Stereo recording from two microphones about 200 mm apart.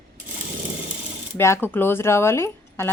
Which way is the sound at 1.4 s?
10° left (ahead or behind).